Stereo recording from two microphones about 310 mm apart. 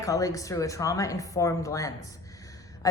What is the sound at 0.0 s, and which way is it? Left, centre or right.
A woman's voice, centre.